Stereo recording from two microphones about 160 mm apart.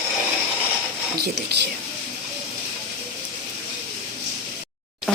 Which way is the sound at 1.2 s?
90° right.